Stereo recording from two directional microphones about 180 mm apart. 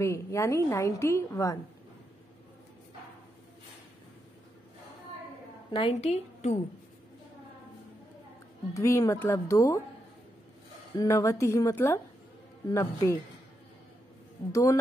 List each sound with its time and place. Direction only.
0.0 s a woman's voice: 15° left (ahead or behind)
5.7 s a woman's voice: 30° left (ahead or behind)
8.7 s a woman's voice: 15° left (ahead or behind)
11.0 s a woman's voice: 15° left (ahead or behind)
14.5 s a woman's voice: 15° left (ahead or behind)